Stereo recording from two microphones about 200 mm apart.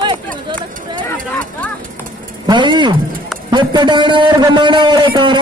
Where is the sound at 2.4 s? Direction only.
20° right (ahead or behind).